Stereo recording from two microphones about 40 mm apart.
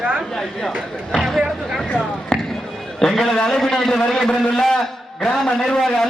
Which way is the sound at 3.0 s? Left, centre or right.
Centre.